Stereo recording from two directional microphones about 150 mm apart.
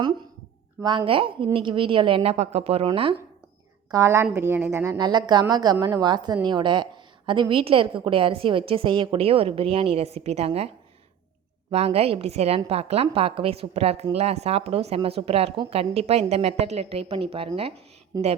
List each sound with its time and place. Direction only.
0.8 s a woman's voice: 30° right (ahead or behind)
2.3 s a woman's voice: 45° right (ahead or behind)
3.9 s a woman's voice: 20° right (ahead or behind)
4.9 s a woman's voice: 30° right (ahead or behind)
11.7 s a woman's voice: 40° right (ahead or behind)
18.1 s a woman's voice: 25° right (ahead or behind)